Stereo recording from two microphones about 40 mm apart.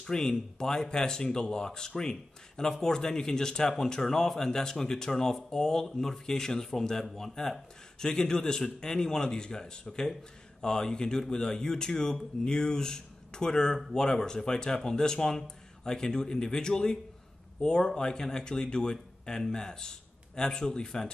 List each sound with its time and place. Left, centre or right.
0.0 s speech: centre